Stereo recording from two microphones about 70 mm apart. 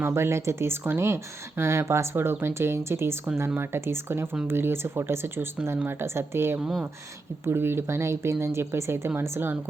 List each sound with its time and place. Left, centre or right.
0.0 s speech: right